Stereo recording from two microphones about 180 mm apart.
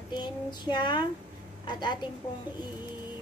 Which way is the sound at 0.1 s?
25° left (ahead or behind).